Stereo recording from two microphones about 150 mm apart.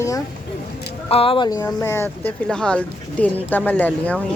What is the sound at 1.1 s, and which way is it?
Speech, 35° left (ahead or behind).